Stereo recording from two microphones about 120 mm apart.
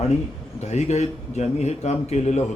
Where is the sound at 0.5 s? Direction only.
65° left (ahead or behind).